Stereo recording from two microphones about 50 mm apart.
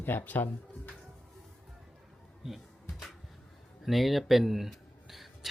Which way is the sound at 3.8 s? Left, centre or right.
Centre.